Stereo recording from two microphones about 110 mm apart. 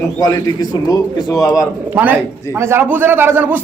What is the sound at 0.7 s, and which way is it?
Speech, 35° left (ahead or behind).